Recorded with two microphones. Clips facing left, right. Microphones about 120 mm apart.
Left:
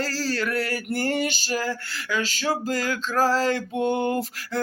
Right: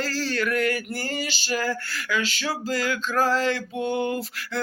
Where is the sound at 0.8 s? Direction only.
60° left (ahead or behind); by 1.6 s 40° left (ahead or behind).